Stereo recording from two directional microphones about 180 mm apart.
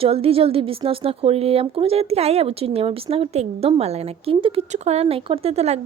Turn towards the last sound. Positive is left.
turn(degrees=-35)  # may be behind; listen again after turning